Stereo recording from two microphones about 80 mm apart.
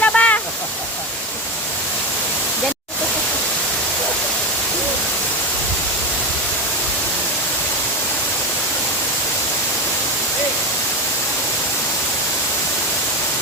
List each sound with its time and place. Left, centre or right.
0.0 s waterfall: centre